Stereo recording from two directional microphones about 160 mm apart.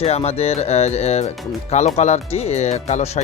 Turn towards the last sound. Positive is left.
turn(degrees=40)  # may be behind; listen again after turning